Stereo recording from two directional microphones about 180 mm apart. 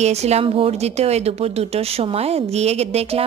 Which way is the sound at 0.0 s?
35° right (ahead or behind).